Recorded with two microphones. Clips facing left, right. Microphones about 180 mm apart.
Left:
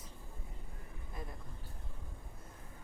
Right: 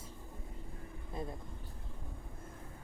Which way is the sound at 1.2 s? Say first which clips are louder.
Right 6 dB; 25° right (ahead or behind).